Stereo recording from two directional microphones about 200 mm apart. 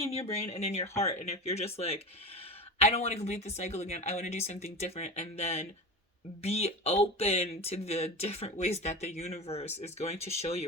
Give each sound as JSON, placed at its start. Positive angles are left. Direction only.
{"t": 0.0, "sound": "speech", "side_deg": 30}